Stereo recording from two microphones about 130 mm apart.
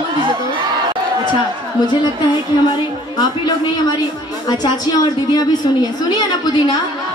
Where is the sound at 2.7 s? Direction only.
30° left (ahead or behind).